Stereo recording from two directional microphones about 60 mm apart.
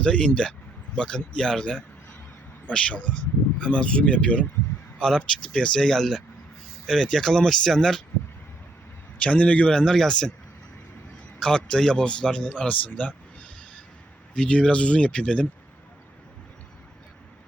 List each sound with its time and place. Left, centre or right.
0.0 s a man's voice: centre
4.9 s a man's voice: centre
9.2 s a man's voice: left
11.3 s a man's voice: centre
14.3 s speech: centre